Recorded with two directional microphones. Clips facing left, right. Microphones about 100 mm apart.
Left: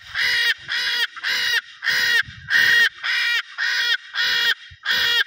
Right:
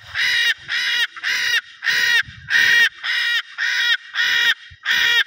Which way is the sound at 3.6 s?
10° left (ahead or behind).